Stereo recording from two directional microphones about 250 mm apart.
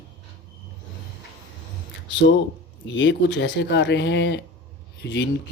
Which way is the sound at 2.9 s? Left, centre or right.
Left.